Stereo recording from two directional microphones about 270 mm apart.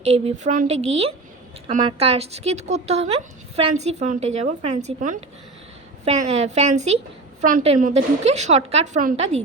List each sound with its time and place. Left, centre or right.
0.0 s speech: right